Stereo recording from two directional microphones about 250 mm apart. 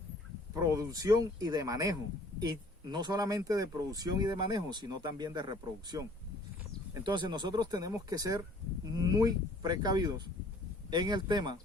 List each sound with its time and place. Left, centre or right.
0.5 s speech: centre